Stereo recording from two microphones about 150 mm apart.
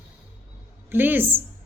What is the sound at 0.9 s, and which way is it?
Speech, 15° right (ahead or behind).